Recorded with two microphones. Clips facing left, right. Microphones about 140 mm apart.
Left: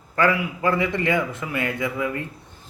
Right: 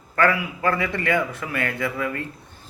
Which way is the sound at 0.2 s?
20° left (ahead or behind).